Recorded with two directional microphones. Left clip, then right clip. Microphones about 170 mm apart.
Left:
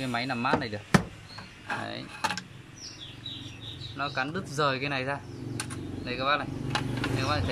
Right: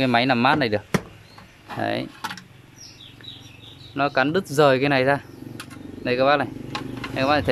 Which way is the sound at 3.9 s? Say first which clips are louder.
Right 11 dB; 50° right (ahead or behind).